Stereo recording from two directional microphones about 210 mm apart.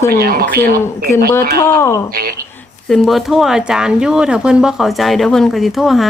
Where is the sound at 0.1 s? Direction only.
45° right (ahead or behind).